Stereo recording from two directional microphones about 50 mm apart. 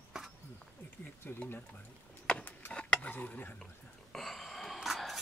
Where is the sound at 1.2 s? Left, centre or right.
Left.